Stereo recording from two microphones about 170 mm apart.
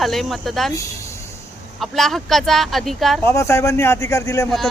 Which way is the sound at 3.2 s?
15° left (ahead or behind).